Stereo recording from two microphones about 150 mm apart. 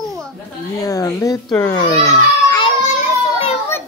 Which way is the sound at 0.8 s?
20° left (ahead or behind).